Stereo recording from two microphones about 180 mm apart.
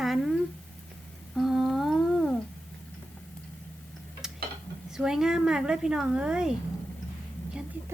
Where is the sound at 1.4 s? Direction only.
Centre (ahead or behind).